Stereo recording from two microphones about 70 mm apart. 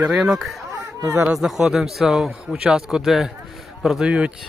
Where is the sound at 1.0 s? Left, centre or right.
Right.